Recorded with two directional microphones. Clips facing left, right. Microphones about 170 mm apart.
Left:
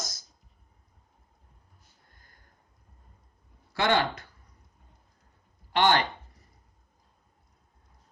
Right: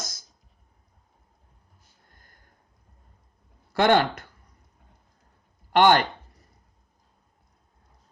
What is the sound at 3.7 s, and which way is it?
Speech, 55° right (ahead or behind).